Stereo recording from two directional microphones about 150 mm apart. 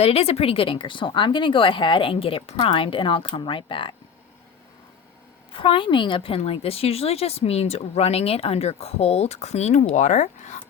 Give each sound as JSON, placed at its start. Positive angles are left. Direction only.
{"t": 0.0, "sound": "speech", "side_deg": 40}
{"t": 5.5, "sound": "a woman's voice", "side_deg": 35}